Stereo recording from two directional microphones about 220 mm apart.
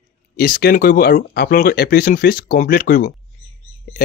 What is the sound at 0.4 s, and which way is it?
Speech, 40° left (ahead or behind).